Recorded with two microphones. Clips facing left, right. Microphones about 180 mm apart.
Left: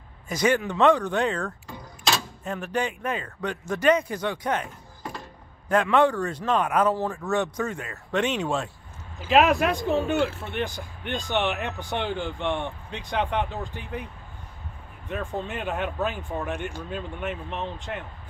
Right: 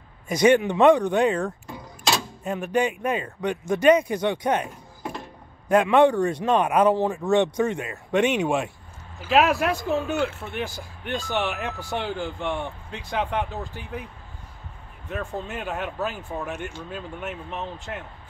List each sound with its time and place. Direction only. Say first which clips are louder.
0.3 s speech: right 5 dB; 15° right (ahead or behind)
15.0 s speech: even; centre (ahead or behind)